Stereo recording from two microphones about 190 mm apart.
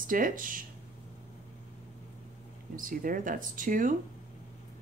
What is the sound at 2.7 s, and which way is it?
Speech, 45° right (ahead or behind).